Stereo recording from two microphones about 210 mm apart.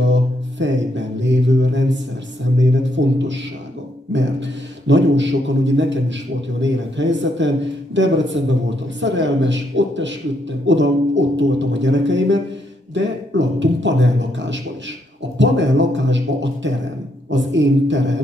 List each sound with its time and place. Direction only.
0.0 s mantra: 60° right (ahead or behind)
2.6 s a sound: 60° right (ahead or behind)
4.1 s a man's voice: 60° right (ahead or behind)